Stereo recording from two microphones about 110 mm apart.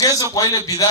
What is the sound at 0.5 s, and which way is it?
Speech, 35° left (ahead or behind).